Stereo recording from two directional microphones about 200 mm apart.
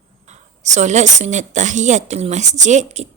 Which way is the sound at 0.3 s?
35° right (ahead or behind).